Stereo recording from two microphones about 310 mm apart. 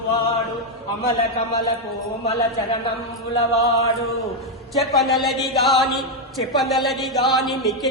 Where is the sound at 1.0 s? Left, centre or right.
Centre.